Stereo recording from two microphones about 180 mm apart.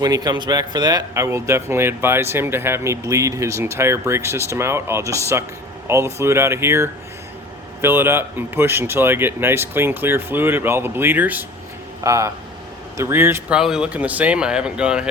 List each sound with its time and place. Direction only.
0.0 s a man's voice: 20° right (ahead or behind); by 15.0 s 5° right (ahead or behind)